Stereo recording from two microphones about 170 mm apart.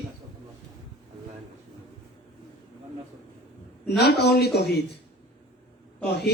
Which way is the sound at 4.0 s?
75° left (ahead or behind).